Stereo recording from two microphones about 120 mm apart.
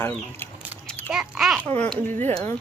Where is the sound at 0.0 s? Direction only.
20° left (ahead or behind).